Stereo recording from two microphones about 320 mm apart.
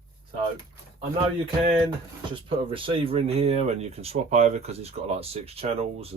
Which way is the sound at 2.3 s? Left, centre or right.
Centre.